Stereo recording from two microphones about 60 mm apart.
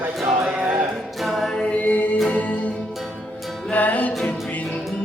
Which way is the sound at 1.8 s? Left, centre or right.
Left.